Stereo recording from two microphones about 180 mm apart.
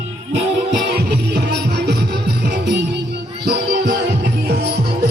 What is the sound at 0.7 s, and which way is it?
Music, 70° right (ahead or behind).